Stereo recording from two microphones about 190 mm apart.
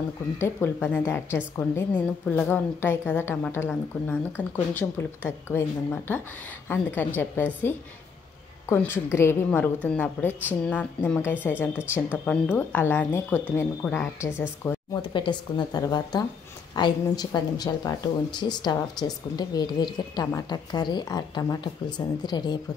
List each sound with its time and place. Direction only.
0.4 s a woman's voice: 10° left (ahead or behind)
15.0 s speech: 25° left (ahead or behind)